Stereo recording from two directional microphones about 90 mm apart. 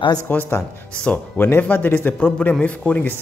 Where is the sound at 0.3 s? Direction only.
25° left (ahead or behind).